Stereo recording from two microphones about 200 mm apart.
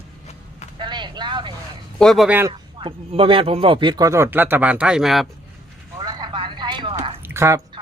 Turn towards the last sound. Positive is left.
turn(degrees=-15)  # may be behind; listen again after turning